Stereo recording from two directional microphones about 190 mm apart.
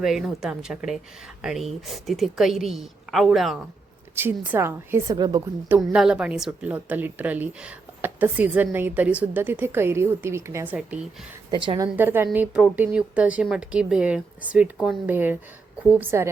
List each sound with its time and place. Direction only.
0.0 s a woman's voice: centre (ahead or behind)
4.1 s a woman's voice: 10° right (ahead or behind)
5.6 s a woman's voice: 10° right (ahead or behind)
11.5 s a woman's voice: 25° right (ahead or behind)
11.9 s a woman's voice: 10° right (ahead or behind)